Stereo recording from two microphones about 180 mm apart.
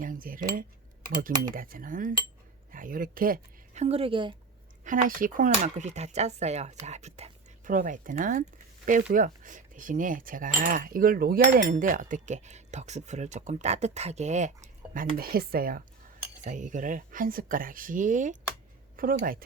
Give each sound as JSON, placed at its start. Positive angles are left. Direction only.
{"t": 0.0, "sound": "speech", "side_deg": -50}
{"t": 3.8, "sound": "a woman's voice", "side_deg": -30}
{"t": 4.8, "sound": "speech", "side_deg": -50}